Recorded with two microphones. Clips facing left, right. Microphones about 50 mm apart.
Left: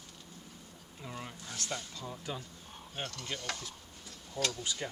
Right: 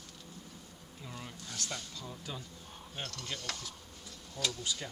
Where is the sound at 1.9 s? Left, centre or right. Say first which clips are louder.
Left 3 dB; centre.